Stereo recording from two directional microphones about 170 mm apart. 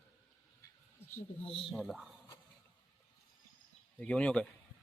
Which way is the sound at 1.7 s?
Centre (ahead or behind).